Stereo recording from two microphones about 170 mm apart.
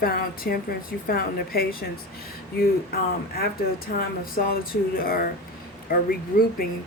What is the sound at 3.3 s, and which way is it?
Speech, 60° left (ahead or behind).